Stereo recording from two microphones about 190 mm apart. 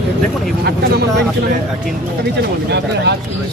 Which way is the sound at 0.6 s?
60° right (ahead or behind).